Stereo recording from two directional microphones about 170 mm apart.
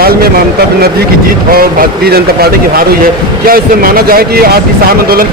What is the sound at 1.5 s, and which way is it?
A man's voice, 60° right (ahead or behind).